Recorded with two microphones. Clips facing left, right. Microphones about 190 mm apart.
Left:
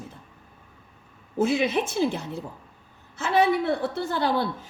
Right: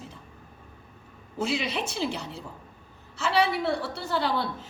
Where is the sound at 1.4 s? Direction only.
50° left (ahead or behind).